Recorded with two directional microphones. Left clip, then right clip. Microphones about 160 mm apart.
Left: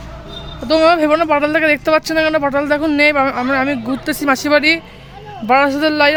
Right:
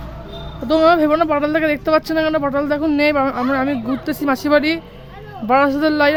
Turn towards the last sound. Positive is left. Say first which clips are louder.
# left 2 dB
turn(degrees=-5)  # may be behind; listen again after turning